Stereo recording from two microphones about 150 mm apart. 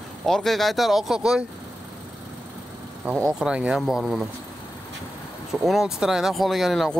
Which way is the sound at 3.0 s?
5° right (ahead or behind).